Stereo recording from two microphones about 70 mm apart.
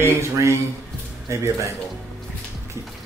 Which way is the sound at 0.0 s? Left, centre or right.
Right.